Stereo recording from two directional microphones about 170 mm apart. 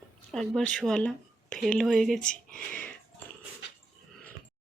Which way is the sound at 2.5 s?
10° left (ahead or behind).